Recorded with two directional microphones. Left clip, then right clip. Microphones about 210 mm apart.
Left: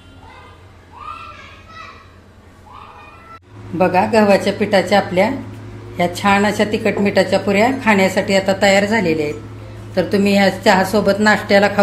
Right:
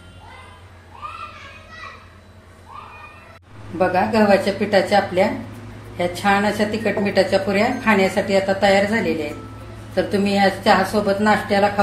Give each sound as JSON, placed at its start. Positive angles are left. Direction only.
{"t": 3.7, "sound": "a woman's voice", "side_deg": 30}